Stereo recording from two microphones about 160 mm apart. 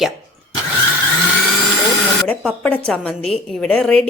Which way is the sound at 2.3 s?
10° left (ahead or behind).